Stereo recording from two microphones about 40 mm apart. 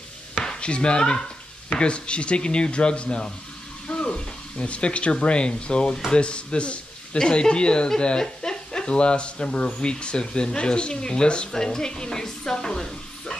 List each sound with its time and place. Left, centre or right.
0.4 s chopping: left
1.7 s a man's voice: left